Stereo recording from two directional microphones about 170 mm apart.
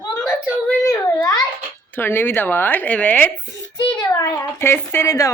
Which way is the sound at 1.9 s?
10° left (ahead or behind).